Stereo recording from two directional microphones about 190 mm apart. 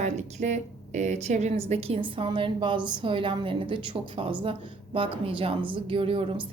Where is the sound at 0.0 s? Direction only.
35° right (ahead or behind).